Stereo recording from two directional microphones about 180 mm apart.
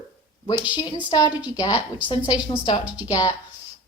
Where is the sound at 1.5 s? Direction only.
20° left (ahead or behind).